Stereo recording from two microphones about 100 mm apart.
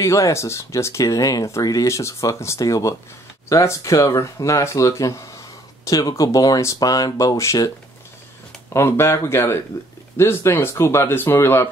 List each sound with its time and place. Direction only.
0.0 s speech: 30° left (ahead or behind)
8.7 s speech: 25° left (ahead or behind)